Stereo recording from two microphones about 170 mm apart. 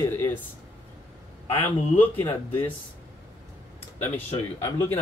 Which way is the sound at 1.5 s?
10° left (ahead or behind).